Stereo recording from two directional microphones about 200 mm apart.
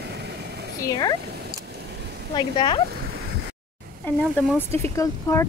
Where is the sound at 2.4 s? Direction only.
25° left (ahead or behind).